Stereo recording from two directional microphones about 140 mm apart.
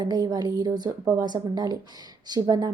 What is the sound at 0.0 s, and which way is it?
Speech, 30° right (ahead or behind).